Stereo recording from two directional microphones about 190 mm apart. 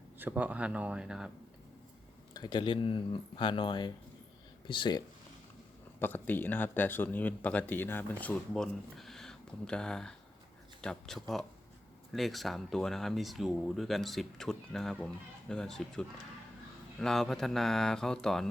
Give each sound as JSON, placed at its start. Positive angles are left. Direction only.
{"t": 0.2, "sound": "speech", "side_deg": -10}
{"t": 2.3, "sound": "speech", "side_deg": 20}
{"t": 6.0, "sound": "speech", "side_deg": 10}